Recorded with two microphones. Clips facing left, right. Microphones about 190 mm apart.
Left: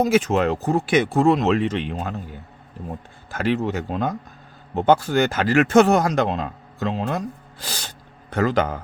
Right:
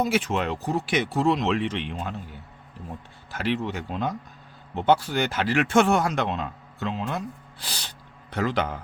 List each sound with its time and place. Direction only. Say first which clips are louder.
0.0 s speech: left 6 dB; 45° left (ahead or behind)